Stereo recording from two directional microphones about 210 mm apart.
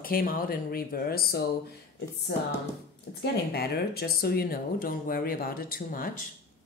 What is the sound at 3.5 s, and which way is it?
A woman's voice, 50° left (ahead or behind).